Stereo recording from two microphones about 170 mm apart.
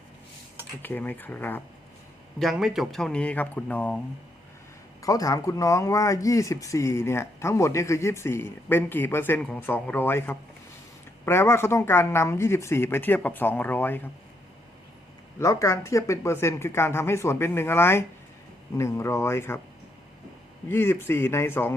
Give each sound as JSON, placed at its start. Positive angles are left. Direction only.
{"t": 0.8, "sound": "speech", "side_deg": 10}
{"t": 2.4, "sound": "speech", "side_deg": 0}
{"t": 5.0, "sound": "speech", "side_deg": 20}
{"t": 15.4, "sound": "speech", "side_deg": 15}
{"t": 20.7, "sound": "speech", "side_deg": 15}